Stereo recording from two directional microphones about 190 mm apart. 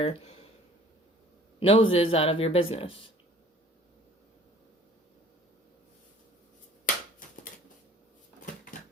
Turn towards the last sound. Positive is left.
turn(degrees=45)  # may be behind; listen again after turning